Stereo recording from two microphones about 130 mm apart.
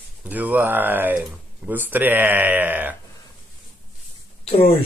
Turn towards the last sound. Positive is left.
turn(degrees=50)  # may be behind; listen again after turning